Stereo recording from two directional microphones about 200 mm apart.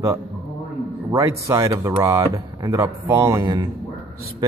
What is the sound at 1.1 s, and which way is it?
Speech, 15° right (ahead or behind).